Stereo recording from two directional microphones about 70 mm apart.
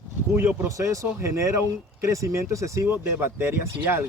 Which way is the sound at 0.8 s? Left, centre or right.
Right.